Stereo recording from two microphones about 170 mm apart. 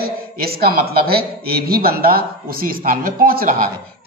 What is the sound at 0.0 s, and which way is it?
A man's voice, 60° right (ahead or behind).